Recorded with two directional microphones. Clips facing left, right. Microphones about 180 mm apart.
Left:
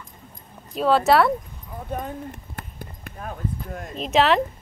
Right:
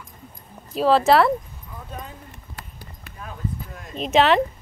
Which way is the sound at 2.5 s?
50° left (ahead or behind).